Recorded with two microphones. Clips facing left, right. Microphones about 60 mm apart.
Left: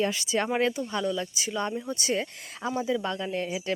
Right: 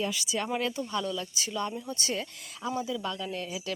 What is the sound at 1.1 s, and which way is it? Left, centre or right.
Speech, centre.